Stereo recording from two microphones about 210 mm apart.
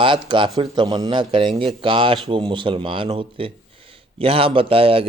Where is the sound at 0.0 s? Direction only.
25° right (ahead or behind).